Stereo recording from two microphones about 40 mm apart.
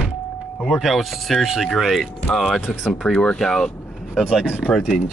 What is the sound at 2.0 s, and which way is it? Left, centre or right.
Speech, centre.